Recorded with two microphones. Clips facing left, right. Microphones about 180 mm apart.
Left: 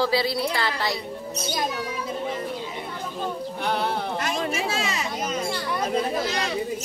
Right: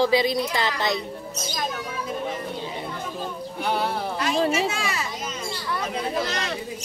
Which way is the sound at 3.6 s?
5° right (ahead or behind).